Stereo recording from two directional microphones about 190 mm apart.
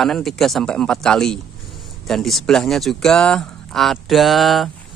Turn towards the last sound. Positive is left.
turn(degrees=0)  # may be behind; listen again after turning